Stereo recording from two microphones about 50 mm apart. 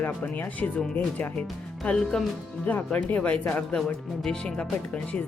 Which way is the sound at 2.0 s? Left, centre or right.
Centre.